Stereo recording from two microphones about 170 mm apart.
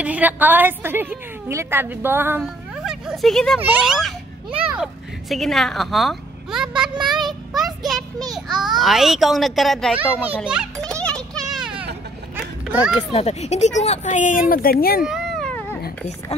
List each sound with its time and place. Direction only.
0.0 s a woman's voice: 10° right (ahead or behind)
2.4 s a child's voice: centre (ahead or behind)
7.0 s a child's voice: 25° right (ahead or behind)
7.5 s a child's voice: centre (ahead or behind)
11.0 s a sound: 5° left (ahead or behind)
13.1 s speech: 40° left (ahead or behind)
14.5 s speech: 60° left (ahead or behind)
15.0 s a sound: centre (ahead or behind)